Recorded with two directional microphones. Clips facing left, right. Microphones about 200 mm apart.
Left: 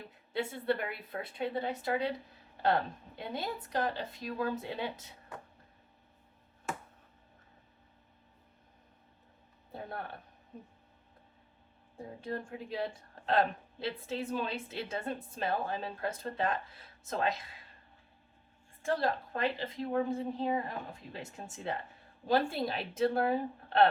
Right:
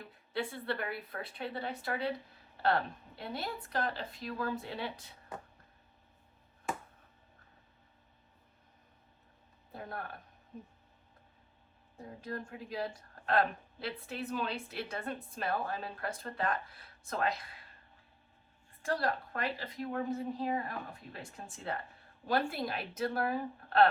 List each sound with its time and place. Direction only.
0.3 s speech: 25° left (ahead or behind)
3.2 s speech: 20° left (ahead or behind)
12.2 s speech: 25° left (ahead or behind)
18.9 s speech: 25° left (ahead or behind)